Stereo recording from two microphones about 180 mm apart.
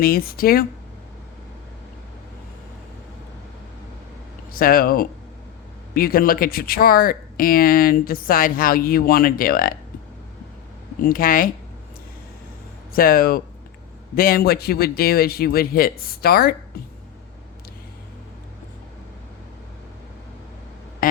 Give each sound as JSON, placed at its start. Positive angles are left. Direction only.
{"t": 0.0, "sound": "a man's voice", "side_deg": 55}
{"t": 4.5, "sound": "speech", "side_deg": 55}
{"t": 11.0, "sound": "speech", "side_deg": 50}
{"t": 12.9, "sound": "a man's voice", "side_deg": 55}
{"t": 21.0, "sound": "a sound", "side_deg": 50}